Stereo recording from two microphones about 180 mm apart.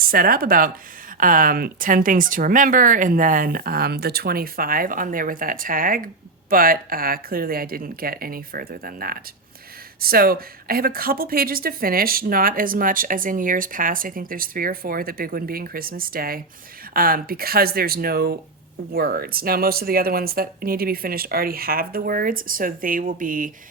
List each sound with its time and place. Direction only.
0.0 s speech: 55° right (ahead or behind)